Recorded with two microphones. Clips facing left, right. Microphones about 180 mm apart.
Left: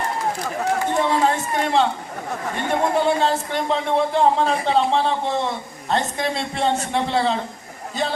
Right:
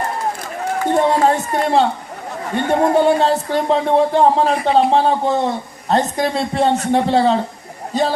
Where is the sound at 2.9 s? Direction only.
35° right (ahead or behind).